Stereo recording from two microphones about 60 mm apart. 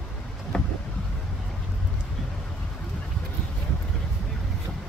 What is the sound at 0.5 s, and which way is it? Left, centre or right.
Boat, centre.